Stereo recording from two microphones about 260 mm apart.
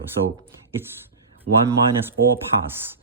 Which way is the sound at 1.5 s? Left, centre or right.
Right.